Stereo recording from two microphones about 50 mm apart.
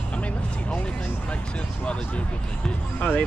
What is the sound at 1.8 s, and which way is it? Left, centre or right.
Speech, left.